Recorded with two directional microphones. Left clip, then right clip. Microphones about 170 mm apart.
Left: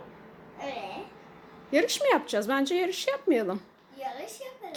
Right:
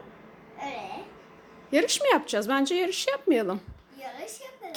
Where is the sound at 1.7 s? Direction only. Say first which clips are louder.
Right 1 dB; 10° right (ahead or behind).